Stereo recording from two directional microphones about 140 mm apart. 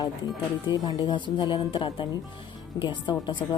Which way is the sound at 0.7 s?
30° left (ahead or behind).